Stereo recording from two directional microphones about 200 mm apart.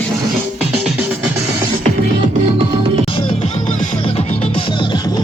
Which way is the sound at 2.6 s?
25° right (ahead or behind).